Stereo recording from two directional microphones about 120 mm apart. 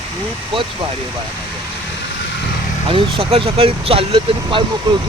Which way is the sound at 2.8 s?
50° right (ahead or behind).